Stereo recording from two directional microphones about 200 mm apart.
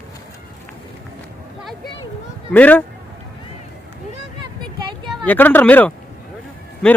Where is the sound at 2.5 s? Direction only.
10° left (ahead or behind).